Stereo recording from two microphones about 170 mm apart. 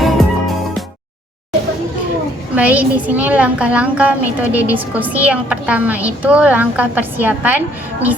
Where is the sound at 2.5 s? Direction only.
10° right (ahead or behind).